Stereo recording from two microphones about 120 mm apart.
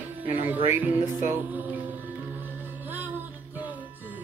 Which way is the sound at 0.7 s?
20° right (ahead or behind).